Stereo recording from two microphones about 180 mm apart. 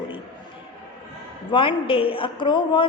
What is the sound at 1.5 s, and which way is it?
A woman's voice, 30° left (ahead or behind).